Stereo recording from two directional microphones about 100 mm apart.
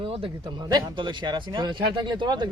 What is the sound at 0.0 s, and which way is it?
Speech, 60° right (ahead or behind).